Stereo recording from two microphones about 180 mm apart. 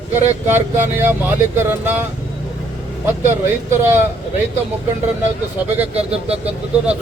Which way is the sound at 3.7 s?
10° right (ahead or behind).